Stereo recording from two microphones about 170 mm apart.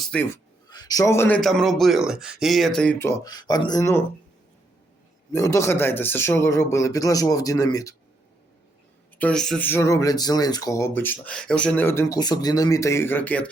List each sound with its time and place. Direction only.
0.0 s speech: 5° left (ahead or behind)
0.7 s a man's voice: 25° left (ahead or behind)
1.4 s speech: centre (ahead or behind)
3.2 s speech: 25° left (ahead or behind)
5.3 s speech: 15° left (ahead or behind)
9.1 s speech: 5° left (ahead or behind)